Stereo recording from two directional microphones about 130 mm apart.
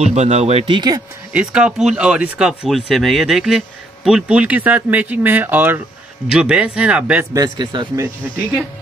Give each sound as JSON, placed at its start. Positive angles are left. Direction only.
{"t": 0.0, "sound": "speech", "side_deg": -60}
{"t": 0.7, "sound": "speech", "side_deg": -30}
{"t": 1.3, "sound": "speech", "side_deg": -10}
{"t": 7.3, "sound": "speech", "side_deg": -30}